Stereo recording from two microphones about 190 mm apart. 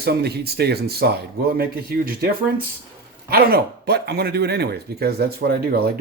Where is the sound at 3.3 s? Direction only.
55° right (ahead or behind).